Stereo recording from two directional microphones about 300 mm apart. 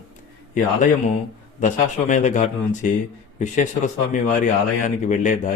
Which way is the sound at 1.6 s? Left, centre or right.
Left.